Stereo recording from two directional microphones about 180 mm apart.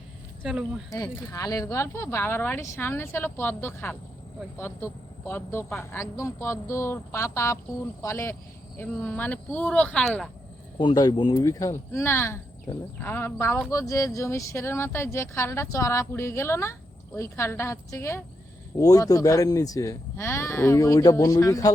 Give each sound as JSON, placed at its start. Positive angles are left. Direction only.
{"t": 0.9, "sound": "speech", "side_deg": 20}
{"t": 10.8, "sound": "speech", "side_deg": 25}